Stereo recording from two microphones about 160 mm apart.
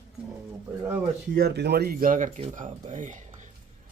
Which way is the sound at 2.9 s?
50° right (ahead or behind).